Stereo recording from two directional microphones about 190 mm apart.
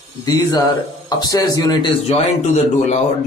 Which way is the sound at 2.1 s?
35° left (ahead or behind).